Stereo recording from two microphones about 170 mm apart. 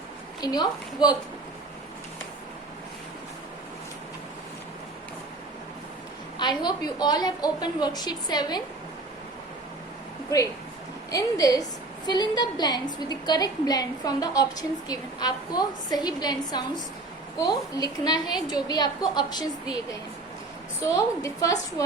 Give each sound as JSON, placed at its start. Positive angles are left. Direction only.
{"t": 0.4, "sound": "a woman's voice", "side_deg": 25}
{"t": 6.4, "sound": "a woman's voice", "side_deg": 25}
{"t": 10.2, "sound": "a woman's voice", "side_deg": 20}